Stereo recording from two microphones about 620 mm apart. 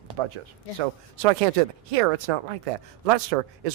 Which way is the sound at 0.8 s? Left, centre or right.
Right.